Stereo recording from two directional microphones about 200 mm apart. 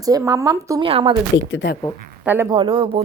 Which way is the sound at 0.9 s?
30° right (ahead or behind).